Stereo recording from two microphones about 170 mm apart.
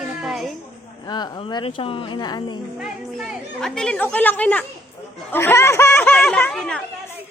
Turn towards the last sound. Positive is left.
turn(degrees=5)  # may be behind; listen again after turning